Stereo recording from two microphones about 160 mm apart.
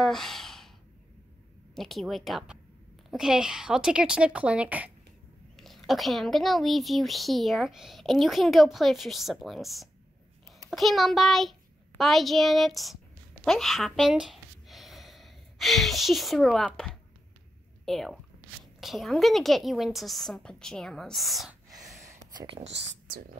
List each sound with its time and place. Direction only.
0.0 s sigh: centre (ahead or behind)
1.8 s a woman's voice: centre (ahead or behind)
17.8 s speech: centre (ahead or behind)
21.9 s a sound: 20° right (ahead or behind)
22.6 s speech: 90° right